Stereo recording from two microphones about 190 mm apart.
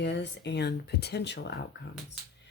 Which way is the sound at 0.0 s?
65° left (ahead or behind).